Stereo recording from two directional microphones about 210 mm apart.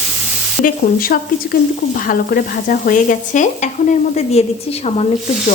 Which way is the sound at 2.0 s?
40° left (ahead or behind).